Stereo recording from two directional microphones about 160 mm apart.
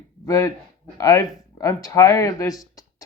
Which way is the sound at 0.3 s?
20° left (ahead or behind).